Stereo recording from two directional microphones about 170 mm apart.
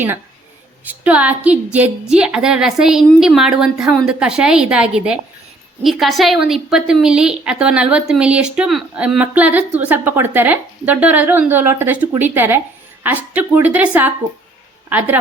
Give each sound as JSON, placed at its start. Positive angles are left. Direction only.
{"t": 0.9, "sound": "a woman's voice", "side_deg": -10}